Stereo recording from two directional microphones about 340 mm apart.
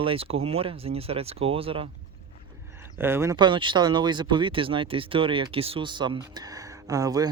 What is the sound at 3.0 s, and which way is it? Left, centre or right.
Speech, centre.